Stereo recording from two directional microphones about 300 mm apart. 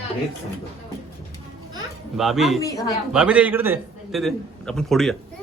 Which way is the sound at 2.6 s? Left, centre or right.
Centre.